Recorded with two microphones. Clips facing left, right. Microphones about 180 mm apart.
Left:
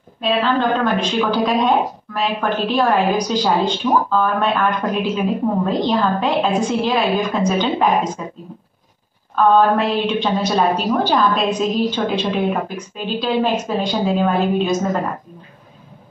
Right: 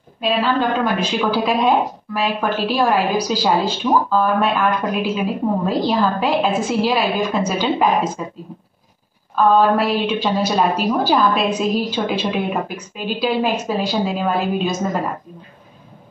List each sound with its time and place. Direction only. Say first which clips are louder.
0.2 s a woman's voice: left 1 dB; 10° right (ahead or behind)
9.3 s a woman's voice: left 1 dB; 5° right (ahead or behind)